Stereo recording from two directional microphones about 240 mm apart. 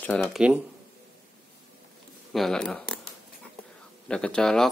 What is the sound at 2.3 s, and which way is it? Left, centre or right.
Speech, centre.